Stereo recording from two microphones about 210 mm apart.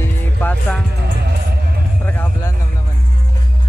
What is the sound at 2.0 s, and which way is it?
Vehicle, 10° left (ahead or behind).